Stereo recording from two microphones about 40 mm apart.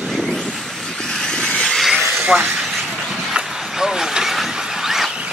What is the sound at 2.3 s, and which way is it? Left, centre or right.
Speech, right.